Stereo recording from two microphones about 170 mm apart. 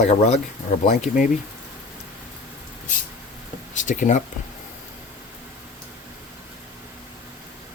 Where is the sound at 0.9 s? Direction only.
55° left (ahead or behind).